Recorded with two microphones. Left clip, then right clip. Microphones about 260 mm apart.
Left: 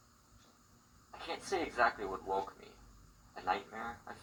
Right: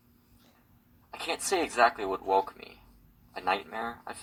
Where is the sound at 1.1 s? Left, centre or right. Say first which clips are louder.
Right 8 dB; right.